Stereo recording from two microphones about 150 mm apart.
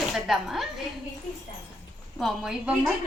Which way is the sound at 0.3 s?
Centre (ahead or behind).